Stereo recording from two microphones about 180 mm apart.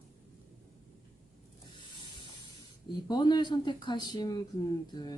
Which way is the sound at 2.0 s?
25° left (ahead or behind).